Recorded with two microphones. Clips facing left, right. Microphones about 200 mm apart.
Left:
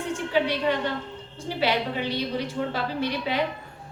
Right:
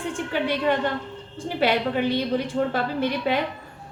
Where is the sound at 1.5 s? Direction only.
50° right (ahead or behind).